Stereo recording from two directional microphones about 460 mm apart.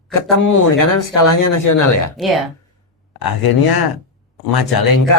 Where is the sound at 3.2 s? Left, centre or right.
Left.